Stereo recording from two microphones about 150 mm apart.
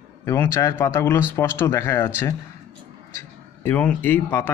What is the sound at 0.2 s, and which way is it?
Speech, 20° left (ahead or behind).